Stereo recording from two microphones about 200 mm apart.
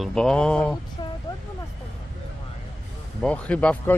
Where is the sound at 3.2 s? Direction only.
5° left (ahead or behind).